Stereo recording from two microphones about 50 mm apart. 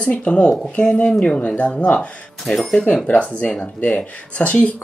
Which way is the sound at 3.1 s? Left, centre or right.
Left.